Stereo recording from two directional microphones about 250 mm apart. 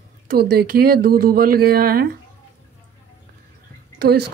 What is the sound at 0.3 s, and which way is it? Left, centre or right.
Speech, right.